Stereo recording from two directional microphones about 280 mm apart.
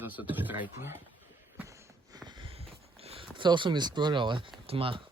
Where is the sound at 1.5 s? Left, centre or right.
Centre.